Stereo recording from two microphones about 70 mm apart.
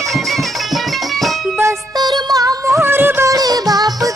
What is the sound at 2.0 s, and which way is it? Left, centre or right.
Music, right.